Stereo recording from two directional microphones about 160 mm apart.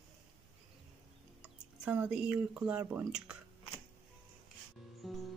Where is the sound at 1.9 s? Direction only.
10° right (ahead or behind).